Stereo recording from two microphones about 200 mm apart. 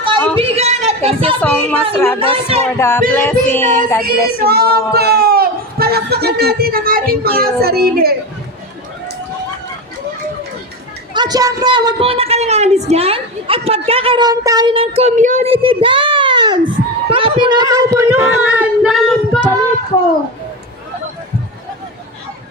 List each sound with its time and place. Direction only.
0.3 s speech: 30° right (ahead or behind)
1.4 s music: 5° left (ahead or behind)
2.1 s speech: 25° right (ahead or behind)
2.7 s music: 10° left (ahead or behind)
4.0 s speech: 50° right (ahead or behind)
11.1 s a woman's voice: 20° right (ahead or behind); by 19.4 s centre (ahead or behind)